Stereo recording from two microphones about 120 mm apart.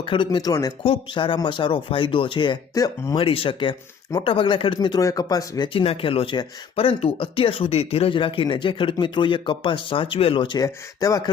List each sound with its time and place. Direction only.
0.0 s speech: 45° left (ahead or behind)
0.3 s speech: 30° left (ahead or behind)
0.9 s speech: 45° left (ahead or behind)
2.7 s speech: 25° left (ahead or behind)
3.2 s speech: 50° left (ahead or behind); by 5.6 s 30° left (ahead or behind)
5.6 s speech: 50° left (ahead or behind); by 11.2 s 30° left (ahead or behind)